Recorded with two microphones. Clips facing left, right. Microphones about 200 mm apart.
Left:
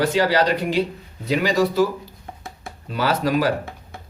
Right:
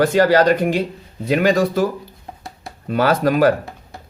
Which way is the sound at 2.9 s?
50° right (ahead or behind).